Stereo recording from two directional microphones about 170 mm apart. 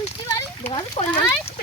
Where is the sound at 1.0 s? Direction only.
35° left (ahead or behind).